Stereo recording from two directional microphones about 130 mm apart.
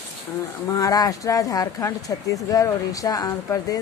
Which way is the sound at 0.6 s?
30° left (ahead or behind).